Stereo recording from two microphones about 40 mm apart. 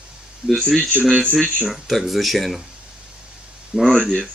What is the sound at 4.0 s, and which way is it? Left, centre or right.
Speech, centre.